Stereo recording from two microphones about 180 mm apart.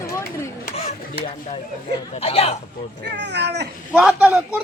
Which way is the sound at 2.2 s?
35° left (ahead or behind).